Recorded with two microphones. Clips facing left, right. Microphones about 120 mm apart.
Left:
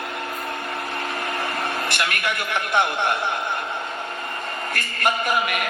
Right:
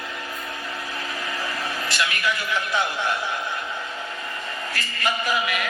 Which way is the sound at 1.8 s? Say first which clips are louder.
Even; 60° left (ahead or behind).